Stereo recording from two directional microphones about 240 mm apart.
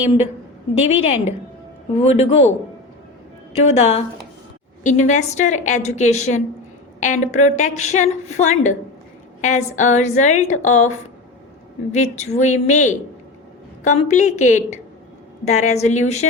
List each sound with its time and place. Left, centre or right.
0.8 s a woman's voice: left
3.6 s a woman's voice: left